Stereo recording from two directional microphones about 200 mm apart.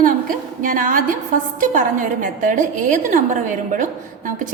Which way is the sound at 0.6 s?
40° right (ahead or behind).